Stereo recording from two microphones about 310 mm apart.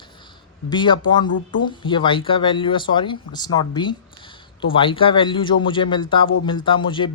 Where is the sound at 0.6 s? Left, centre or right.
Centre.